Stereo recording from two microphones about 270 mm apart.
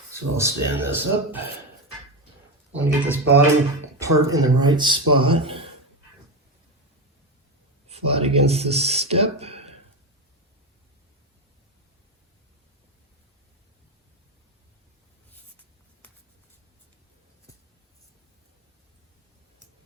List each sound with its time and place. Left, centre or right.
0.1 s speech: centre
2.7 s speech: centre
7.9 s speech: right